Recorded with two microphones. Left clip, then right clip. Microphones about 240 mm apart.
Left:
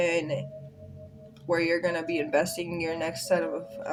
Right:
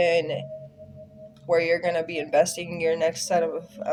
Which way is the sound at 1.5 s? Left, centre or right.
Right.